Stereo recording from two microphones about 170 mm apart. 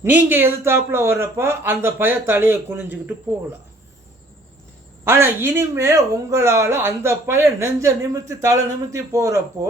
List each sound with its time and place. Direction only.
0.0 s speech: 15° right (ahead or behind)
5.0 s speech: 15° right (ahead or behind)